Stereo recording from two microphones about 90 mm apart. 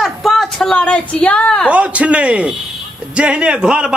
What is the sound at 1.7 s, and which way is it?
A man's voice, 15° right (ahead or behind).